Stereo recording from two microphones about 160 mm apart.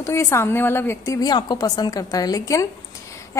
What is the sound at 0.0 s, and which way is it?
A woman's voice, 15° left (ahead or behind).